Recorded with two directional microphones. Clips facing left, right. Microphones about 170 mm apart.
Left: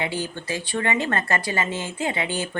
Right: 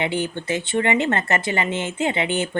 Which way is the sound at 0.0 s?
25° right (ahead or behind).